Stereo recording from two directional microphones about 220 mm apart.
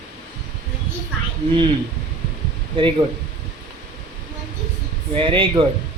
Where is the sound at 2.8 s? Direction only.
25° right (ahead or behind).